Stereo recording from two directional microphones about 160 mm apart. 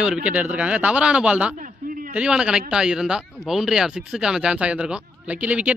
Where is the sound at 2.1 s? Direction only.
5° right (ahead or behind).